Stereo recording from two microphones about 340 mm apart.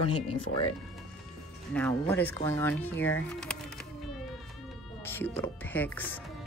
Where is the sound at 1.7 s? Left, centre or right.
Centre.